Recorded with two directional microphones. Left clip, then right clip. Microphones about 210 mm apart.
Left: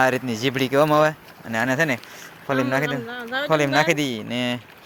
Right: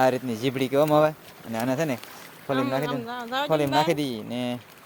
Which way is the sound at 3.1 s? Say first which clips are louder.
Left 1 dB; 30° right (ahead or behind).